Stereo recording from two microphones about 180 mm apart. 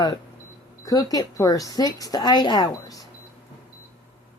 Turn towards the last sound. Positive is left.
turn(degrees=20)  # may be behind; listen again after turning